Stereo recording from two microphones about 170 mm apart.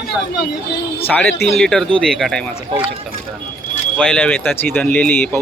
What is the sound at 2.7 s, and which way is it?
Speech, 30° right (ahead or behind).